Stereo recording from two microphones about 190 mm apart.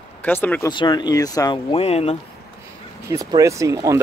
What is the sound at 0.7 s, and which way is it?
Speech, 25° left (ahead or behind).